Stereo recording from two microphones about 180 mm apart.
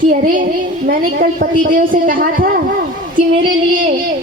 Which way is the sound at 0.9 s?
55° right (ahead or behind).